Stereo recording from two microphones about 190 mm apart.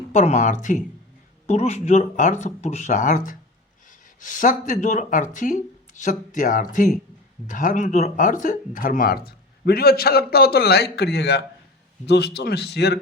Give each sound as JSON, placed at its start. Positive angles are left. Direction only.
{"t": 0.1, "sound": "a man's voice", "side_deg": 40}